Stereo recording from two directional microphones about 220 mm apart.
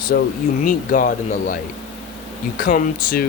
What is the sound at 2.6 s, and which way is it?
Speech, 40° left (ahead or behind).